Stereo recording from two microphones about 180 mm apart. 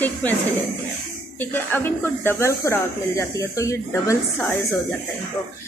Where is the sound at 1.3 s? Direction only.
10° left (ahead or behind).